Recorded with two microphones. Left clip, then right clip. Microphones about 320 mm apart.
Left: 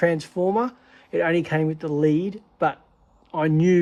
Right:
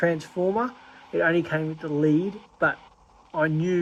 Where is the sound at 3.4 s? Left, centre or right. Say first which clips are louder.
Left 4 dB; left.